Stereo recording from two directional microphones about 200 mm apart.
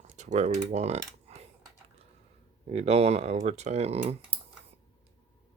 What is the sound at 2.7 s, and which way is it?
Speech, 30° right (ahead or behind).